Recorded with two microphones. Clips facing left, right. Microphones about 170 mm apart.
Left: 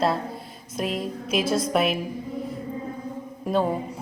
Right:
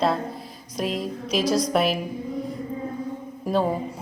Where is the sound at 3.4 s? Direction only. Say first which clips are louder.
Even; centre (ahead or behind).